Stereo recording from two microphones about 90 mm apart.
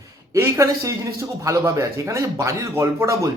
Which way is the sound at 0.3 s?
30° right (ahead or behind).